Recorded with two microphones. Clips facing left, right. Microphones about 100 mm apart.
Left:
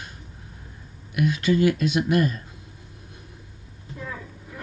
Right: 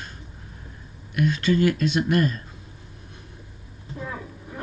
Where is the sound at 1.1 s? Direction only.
10° left (ahead or behind).